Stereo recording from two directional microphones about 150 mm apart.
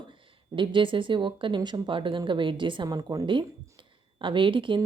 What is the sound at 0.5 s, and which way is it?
A woman's voice, 35° right (ahead or behind).